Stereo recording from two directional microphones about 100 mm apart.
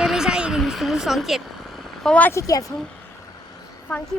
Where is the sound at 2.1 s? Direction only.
15° left (ahead or behind).